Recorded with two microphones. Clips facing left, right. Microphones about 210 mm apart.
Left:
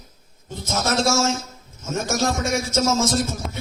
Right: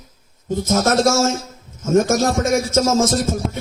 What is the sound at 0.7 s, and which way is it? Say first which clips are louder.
A man's voice: right 5 dB; 50° right (ahead or behind).